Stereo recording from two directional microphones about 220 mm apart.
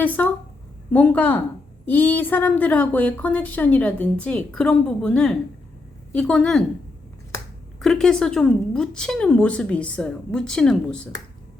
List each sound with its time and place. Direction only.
0.0 s speech: 5° left (ahead or behind)
7.8 s speech: centre (ahead or behind)